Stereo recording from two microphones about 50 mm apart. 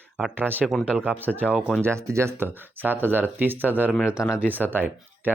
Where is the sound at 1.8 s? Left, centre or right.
Right.